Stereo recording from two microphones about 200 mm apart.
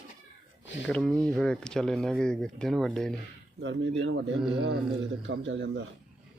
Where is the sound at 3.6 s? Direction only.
70° right (ahead or behind).